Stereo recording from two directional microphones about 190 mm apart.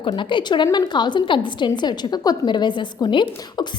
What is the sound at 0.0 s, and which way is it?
A woman's voice, 25° left (ahead or behind).